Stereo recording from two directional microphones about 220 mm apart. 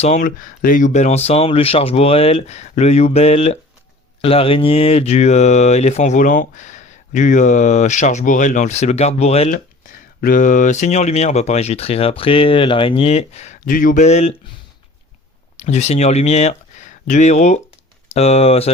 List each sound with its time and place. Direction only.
0.0 s speech: 35° left (ahead or behind)
10.2 s speech: 40° left (ahead or behind)
15.5 s speech: 30° left (ahead or behind)